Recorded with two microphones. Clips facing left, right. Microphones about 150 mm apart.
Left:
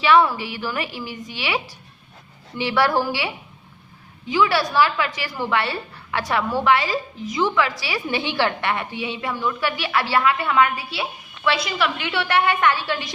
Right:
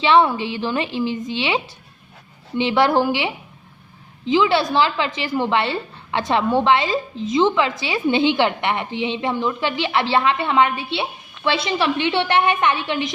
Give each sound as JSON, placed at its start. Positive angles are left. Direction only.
{"t": 0.0, "sound": "a woman's voice", "side_deg": -25}